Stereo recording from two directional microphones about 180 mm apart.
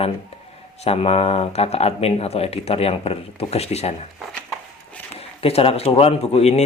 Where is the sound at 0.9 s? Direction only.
35° left (ahead or behind).